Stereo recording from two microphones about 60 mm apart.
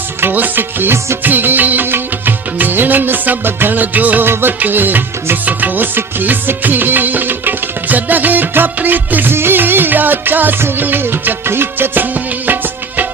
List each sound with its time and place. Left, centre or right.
0.2 s music: right
1.2 s music of bollywood: right
4.3 s music: right